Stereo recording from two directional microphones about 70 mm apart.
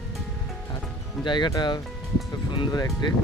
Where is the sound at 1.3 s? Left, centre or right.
Left.